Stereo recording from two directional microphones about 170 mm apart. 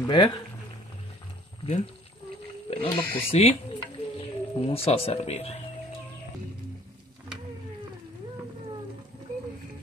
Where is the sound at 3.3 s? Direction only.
35° left (ahead or behind).